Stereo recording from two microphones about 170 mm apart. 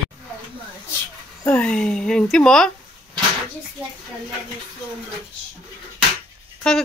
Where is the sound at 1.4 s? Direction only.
5° left (ahead or behind).